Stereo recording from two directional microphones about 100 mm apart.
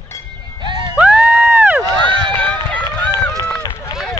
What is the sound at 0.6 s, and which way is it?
Music, 55° right (ahead or behind).